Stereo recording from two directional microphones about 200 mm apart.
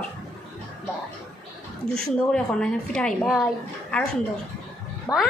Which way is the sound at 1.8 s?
5° left (ahead or behind).